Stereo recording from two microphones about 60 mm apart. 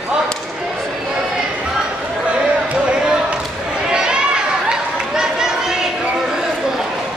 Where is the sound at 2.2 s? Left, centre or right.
Centre.